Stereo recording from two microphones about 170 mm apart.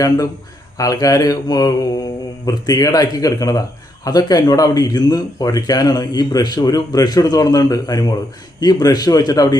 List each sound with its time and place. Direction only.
0.8 s speech: 20° left (ahead or behind)